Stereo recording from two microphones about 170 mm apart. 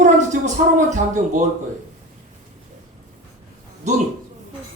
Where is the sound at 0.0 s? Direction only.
45° right (ahead or behind).